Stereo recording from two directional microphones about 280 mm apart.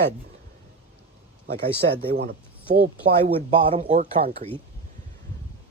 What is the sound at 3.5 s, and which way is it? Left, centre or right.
Speech, centre.